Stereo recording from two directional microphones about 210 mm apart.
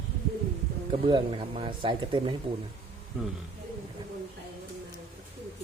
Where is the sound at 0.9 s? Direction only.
25° right (ahead or behind).